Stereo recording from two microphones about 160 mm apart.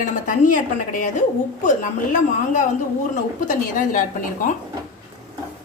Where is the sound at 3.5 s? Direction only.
55° left (ahead or behind).